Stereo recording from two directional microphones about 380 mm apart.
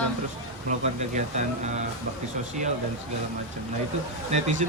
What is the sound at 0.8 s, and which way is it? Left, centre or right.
Speech, centre.